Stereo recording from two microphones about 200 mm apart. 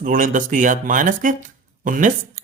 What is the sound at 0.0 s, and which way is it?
A man's voice, 40° right (ahead or behind).